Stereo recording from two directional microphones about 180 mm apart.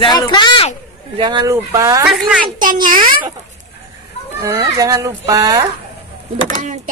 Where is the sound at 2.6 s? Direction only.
50° right (ahead or behind).